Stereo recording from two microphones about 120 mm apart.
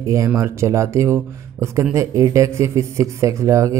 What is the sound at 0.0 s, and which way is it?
Speech, 25° right (ahead or behind).